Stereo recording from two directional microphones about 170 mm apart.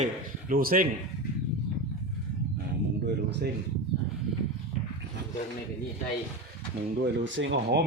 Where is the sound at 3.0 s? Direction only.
80° right.